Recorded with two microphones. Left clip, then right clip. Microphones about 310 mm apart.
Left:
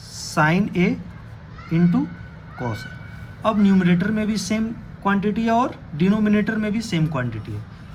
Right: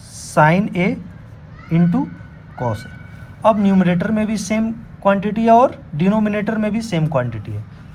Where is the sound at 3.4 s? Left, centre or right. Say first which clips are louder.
Right 5 dB; centre.